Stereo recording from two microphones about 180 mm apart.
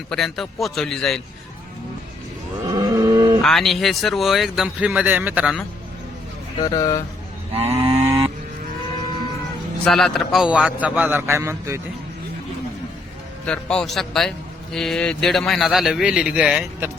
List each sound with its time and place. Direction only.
0.1 s a man's voice: centre (ahead or behind)
2.6 s cattle: 20° right (ahead or behind)
3.4 s a man's voice: centre (ahead or behind)
6.6 s speech: 20° left (ahead or behind)
7.5 s cattle: 35° right (ahead or behind)
8.0 s a sound: 15° right (ahead or behind)
9.8 s a man's voice: centre (ahead or behind); by 11.8 s 15° right (ahead or behind)
13.4 s a man's voice: 5° left (ahead or behind)